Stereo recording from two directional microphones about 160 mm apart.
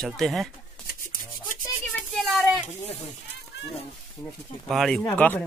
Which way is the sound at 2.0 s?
Centre (ahead or behind).